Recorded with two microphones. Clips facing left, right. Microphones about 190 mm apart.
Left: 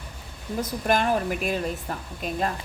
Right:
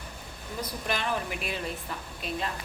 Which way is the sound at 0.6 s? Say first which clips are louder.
Left 8 dB; 45° left (ahead or behind).